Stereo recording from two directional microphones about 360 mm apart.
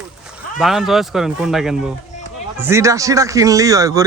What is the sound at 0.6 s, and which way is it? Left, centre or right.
A man's voice, centre.